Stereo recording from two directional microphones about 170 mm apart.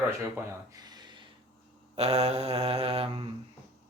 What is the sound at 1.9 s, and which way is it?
Mantra, 40° right (ahead or behind).